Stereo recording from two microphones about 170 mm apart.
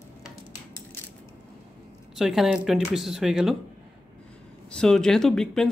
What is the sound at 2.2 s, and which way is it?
Speech, centre (ahead or behind).